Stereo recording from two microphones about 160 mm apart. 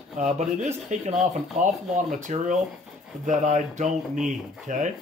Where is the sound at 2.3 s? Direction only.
50° right (ahead or behind).